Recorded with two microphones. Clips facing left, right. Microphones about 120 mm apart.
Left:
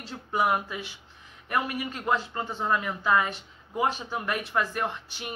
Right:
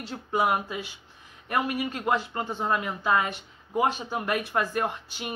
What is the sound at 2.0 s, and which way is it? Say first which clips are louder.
Speech: left 1 dB; 15° right (ahead or behind).